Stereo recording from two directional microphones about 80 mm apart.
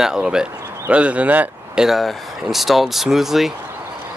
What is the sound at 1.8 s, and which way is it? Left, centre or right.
Speech, centre.